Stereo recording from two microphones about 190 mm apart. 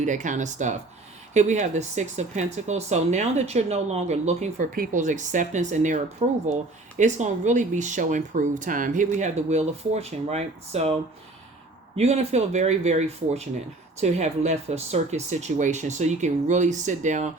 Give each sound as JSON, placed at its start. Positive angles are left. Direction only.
{"t": 0.0, "sound": "speech", "side_deg": -40}
{"t": 4.7, "sound": "speech", "side_deg": -45}
{"t": 11.9, "sound": "speech", "side_deg": -35}